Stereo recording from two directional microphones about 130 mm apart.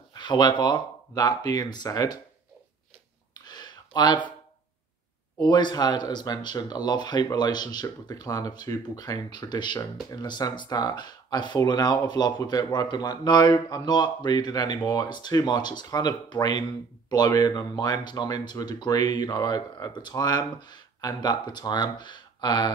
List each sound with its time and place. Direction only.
0.1 s speech: 35° left (ahead or behind)
3.3 s a sound: 30° left (ahead or behind)
5.4 s speech: 35° left (ahead or behind)